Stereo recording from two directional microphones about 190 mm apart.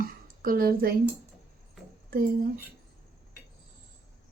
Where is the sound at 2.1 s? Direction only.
50° right (ahead or behind).